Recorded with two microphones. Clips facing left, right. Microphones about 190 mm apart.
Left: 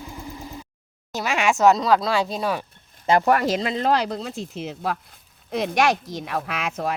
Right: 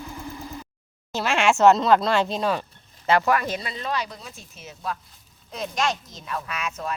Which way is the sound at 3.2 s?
65° left (ahead or behind).